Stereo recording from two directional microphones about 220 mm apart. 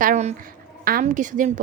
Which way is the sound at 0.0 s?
35° right (ahead or behind).